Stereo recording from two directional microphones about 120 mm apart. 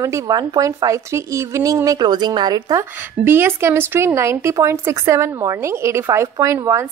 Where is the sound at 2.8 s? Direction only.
20° right (ahead or behind).